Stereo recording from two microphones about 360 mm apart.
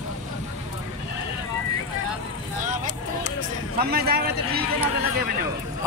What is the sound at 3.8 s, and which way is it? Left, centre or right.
Speech, right.